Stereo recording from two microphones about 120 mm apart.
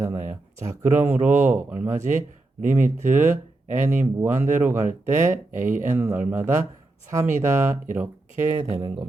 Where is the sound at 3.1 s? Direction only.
20° right (ahead or behind).